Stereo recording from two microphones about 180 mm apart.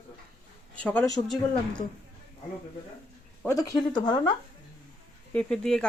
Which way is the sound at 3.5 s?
20° left (ahead or behind).